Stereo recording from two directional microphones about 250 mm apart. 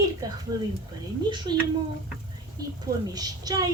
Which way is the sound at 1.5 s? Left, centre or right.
Centre.